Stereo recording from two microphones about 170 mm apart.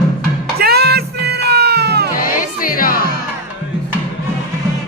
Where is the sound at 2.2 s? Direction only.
55° left (ahead or behind).